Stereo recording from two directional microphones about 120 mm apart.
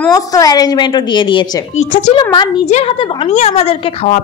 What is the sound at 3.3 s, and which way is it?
Speech, 65° left (ahead or behind).